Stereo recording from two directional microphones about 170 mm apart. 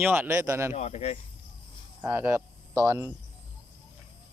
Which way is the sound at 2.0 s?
15° right (ahead or behind).